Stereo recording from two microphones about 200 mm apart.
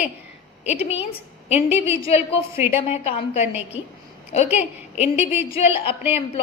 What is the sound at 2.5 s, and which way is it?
Speech, 10° right (ahead or behind).